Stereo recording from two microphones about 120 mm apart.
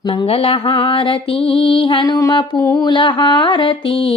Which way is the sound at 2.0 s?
30° left (ahead or behind).